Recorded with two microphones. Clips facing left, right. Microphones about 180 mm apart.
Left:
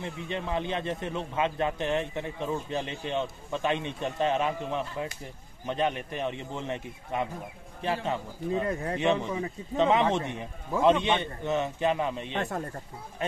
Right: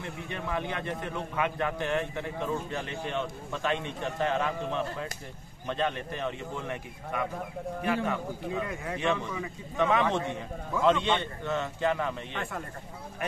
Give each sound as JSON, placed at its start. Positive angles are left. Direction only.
{"t": 0.0, "sound": "a man's voice", "side_deg": 20}